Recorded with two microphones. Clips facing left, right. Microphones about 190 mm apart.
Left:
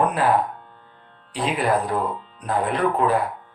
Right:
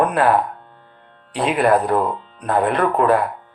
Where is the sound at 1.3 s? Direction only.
60° right (ahead or behind).